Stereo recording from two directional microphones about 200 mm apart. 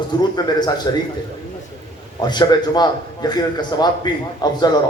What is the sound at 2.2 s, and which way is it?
A man's voice, 20° left (ahead or behind).